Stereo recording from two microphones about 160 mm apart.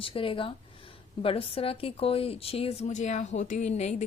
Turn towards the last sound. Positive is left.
turn(degrees=45)  # may be behind; listen again after turning